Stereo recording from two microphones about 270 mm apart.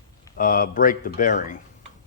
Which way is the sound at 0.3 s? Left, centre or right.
Left.